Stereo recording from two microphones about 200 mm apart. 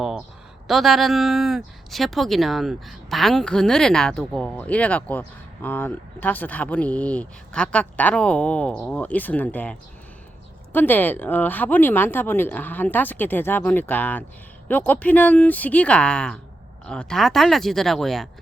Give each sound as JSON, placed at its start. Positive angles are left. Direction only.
{"t": 0.7, "sound": "speech", "side_deg": 0}